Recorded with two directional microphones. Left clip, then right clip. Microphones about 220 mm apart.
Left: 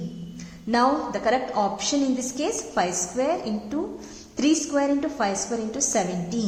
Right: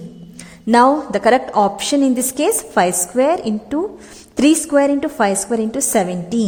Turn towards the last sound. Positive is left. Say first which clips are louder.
# right 8 dB
turn(degrees=-45)  # may be behind; listen again after turning